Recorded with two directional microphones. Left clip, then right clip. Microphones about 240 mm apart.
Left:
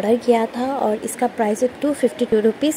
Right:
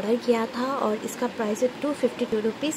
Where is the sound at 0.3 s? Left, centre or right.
Centre.